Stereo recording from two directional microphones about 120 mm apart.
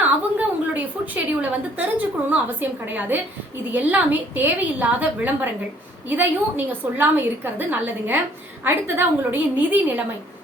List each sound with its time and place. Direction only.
0.0 s a woman's voice: 15° right (ahead or behind)
6.7 s a woman's voice: 15° right (ahead or behind)